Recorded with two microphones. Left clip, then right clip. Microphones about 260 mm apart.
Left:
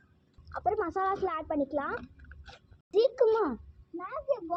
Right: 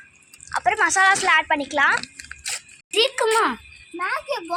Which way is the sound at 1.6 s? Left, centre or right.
Right.